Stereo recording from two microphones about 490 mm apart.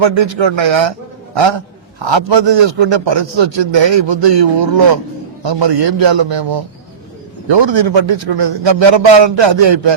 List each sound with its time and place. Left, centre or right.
0.0 s a man's voice: right